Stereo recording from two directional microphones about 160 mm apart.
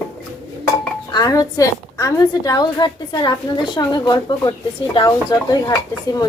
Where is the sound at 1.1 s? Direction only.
25° left (ahead or behind).